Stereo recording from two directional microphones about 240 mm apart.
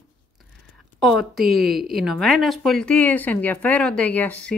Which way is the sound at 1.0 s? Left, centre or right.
Centre.